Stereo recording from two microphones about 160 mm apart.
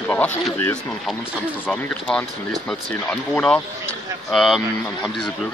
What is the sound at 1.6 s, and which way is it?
Speech, 10° left (ahead or behind).